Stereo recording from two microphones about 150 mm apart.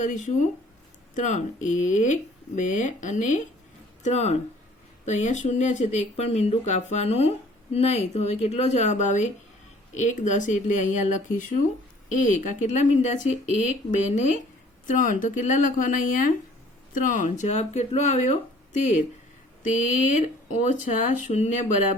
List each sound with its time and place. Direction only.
0.0 s speech: 55° left (ahead or behind)